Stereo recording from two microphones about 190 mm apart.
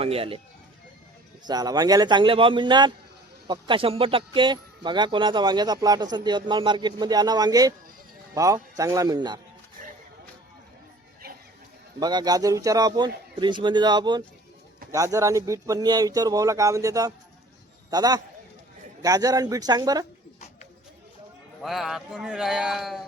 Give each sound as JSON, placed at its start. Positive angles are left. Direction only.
{"t": 0.0, "sound": "speech", "side_deg": -30}
{"t": 1.5, "sound": "a man's voice", "side_deg": -20}
{"t": 11.9, "sound": "a man's voice", "side_deg": -20}
{"t": 21.6, "sound": "a man's voice", "side_deg": 0}